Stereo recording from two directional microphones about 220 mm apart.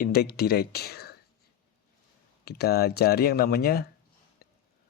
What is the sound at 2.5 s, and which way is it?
Speech, 45° left (ahead or behind).